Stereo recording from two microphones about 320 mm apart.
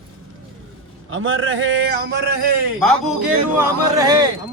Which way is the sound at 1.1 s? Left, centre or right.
Right.